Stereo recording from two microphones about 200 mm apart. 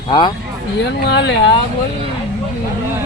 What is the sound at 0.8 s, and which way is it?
Speech, 60° left (ahead or behind).